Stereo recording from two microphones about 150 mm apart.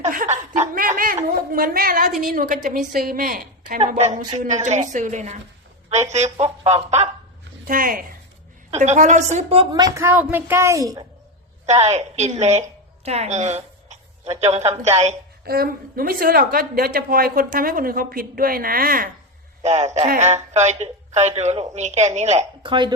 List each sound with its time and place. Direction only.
0.0 s a woman's voice: 55° right (ahead or behind); by 3.8 s 75° right (ahead or behind)
3.8 s a woman's voice: 50° right (ahead or behind)
7.7 s a woman's voice: 70° right (ahead or behind)
8.7 s a woman's voice: 50° right (ahead or behind)
9.8 s a woman's voice: 20° right (ahead or behind)
11.6 s a woman's voice: 50° right (ahead or behind)
15.4 s a woman's voice: 85° right
19.6 s a woman's voice: 50° right (ahead or behind)
22.6 s speech: 30° right (ahead or behind)